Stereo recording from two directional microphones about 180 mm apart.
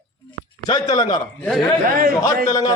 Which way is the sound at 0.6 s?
20° left (ahead or behind).